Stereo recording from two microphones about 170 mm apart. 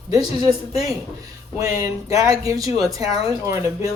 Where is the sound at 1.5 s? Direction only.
20° right (ahead or behind).